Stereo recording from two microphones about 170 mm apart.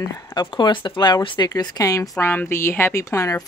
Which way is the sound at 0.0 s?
25° left (ahead or behind).